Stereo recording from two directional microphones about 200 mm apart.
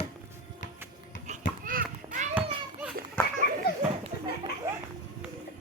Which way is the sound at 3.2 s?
10° left (ahead or behind).